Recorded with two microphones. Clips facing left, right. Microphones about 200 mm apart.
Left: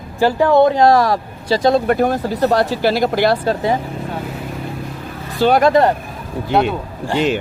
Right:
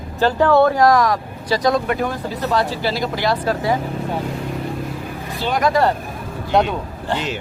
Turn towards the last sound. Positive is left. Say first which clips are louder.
# left 2 dB
turn(degrees=5)  # may be behind; listen again after turning